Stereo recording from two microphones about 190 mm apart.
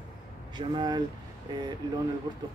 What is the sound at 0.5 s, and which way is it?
Speech, 25° right (ahead or behind).